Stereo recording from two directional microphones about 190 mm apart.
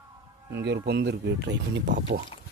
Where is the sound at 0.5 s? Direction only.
60° right (ahead or behind).